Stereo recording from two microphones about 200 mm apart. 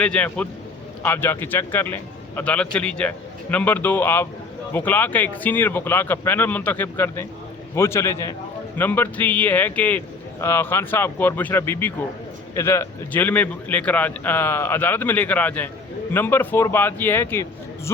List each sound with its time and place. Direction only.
0.0 s a man's voice: 5° left (ahead or behind)